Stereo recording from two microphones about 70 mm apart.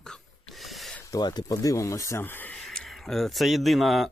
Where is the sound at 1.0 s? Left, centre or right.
Left.